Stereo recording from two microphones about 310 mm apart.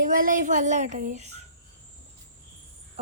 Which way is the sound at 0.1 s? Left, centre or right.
Right.